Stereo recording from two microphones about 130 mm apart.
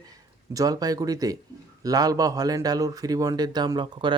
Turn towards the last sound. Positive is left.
turn(degrees=-35)  # may be behind; listen again after turning